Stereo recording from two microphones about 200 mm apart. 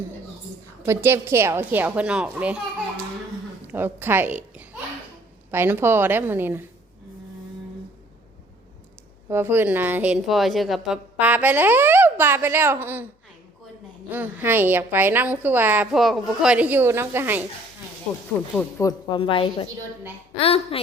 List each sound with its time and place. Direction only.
0.9 s a woman's voice: 10° right (ahead or behind)
3.7 s a woman's voice: 10° right (ahead or behind)
9.3 s a woman's voice: 10° right (ahead or behind)
14.1 s a woman's voice: 10° right (ahead or behind)
18.8 s a woman's voice: 20° left (ahead or behind)